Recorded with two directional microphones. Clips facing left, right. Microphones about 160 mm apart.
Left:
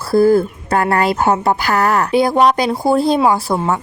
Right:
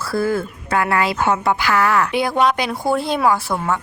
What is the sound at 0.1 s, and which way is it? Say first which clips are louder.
Speech: left 9 dB; 35° left (ahead or behind).